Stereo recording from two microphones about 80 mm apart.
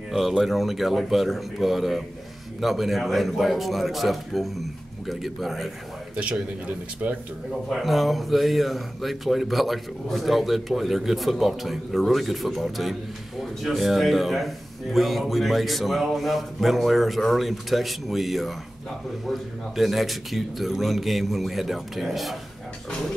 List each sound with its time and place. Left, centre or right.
0.1 s speech: centre
6.1 s a man's voice: centre
7.7 s speech: centre